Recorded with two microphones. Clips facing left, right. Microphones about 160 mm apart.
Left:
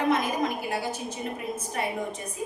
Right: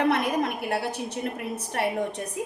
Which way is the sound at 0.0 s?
70° right (ahead or behind).